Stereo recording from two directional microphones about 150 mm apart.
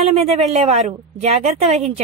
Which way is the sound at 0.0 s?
45° right (ahead or behind).